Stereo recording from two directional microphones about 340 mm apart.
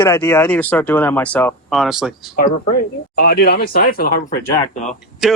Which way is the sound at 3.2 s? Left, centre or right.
Left.